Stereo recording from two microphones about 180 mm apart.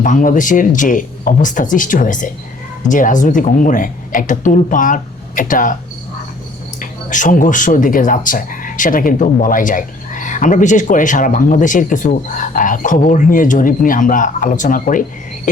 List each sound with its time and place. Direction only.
0.0 s speech: 50° left (ahead or behind)
6.7 s speech: 45° left (ahead or behind)